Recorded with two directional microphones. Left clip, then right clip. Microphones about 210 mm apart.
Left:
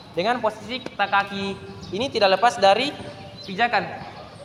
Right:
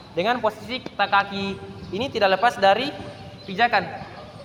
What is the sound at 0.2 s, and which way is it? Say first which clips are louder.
A man's voice: even; 15° right (ahead or behind).